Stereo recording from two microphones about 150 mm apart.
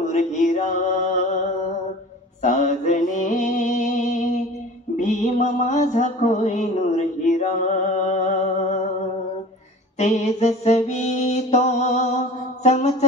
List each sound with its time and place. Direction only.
0.0 s music: 50° left (ahead or behind)
2.4 s mantra: 55° left (ahead or behind)
9.9 s mantra: 50° left (ahead or behind)